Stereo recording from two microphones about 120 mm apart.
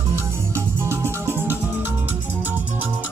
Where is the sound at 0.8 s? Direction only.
20° right (ahead or behind).